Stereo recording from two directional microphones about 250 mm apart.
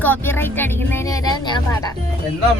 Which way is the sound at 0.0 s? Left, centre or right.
Centre.